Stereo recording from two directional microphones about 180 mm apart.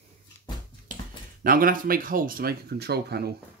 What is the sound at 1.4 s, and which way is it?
Speech, 50° right (ahead or behind).